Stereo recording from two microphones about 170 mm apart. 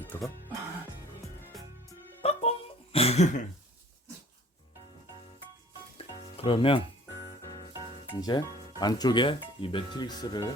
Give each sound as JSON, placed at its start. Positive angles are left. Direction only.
{"t": 0.1, "sound": "speech", "side_deg": 15}
{"t": 2.2, "sound": "music", "side_deg": 35}
{"t": 6.0, "sound": "music", "side_deg": 35}
{"t": 8.1, "sound": "speech", "side_deg": 25}